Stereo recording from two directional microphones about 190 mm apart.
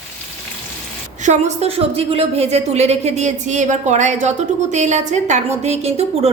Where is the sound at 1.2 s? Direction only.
35° right (ahead or behind).